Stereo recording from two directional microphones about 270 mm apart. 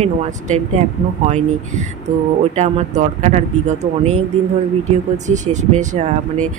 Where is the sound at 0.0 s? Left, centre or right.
Right.